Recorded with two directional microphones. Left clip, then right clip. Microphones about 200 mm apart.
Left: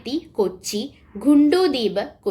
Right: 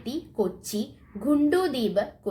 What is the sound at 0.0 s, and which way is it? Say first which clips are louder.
A woman's voice: left 6 dB; 15° left (ahead or behind).